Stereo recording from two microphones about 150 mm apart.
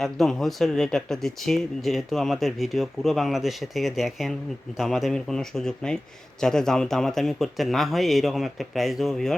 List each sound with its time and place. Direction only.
0.0 s speech: centre (ahead or behind)